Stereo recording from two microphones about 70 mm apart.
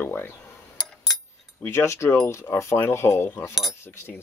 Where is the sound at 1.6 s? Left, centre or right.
Left.